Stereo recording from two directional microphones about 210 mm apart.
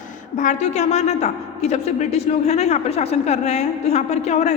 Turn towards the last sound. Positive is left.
turn(degrees=30)  # may be behind; listen again after turning